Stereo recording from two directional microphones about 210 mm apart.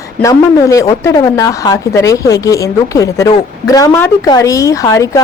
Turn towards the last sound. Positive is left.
turn(degrees=15)  # may be behind; listen again after turning